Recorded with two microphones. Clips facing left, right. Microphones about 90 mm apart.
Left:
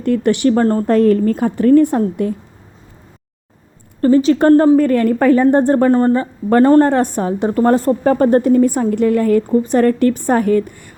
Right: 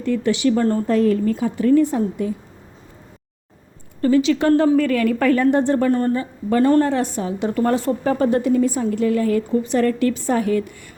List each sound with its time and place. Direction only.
0.0 s a woman's voice: 55° left (ahead or behind)
4.0 s a woman's voice: 40° left (ahead or behind)
7.4 s a woman's voice: 35° left (ahead or behind)